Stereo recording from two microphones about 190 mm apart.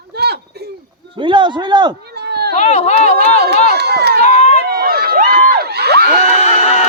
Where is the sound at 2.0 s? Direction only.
60° right (ahead or behind).